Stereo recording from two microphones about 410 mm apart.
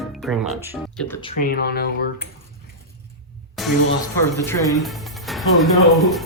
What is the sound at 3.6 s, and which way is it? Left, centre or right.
Music, centre.